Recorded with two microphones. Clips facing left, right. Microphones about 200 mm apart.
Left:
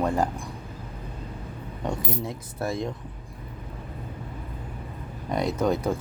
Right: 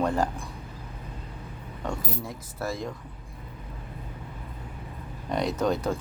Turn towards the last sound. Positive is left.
turn(degrees=10)  # may be behind; listen again after turning